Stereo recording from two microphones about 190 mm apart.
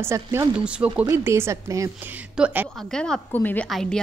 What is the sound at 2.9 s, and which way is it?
A woman's voice, 5° left (ahead or behind).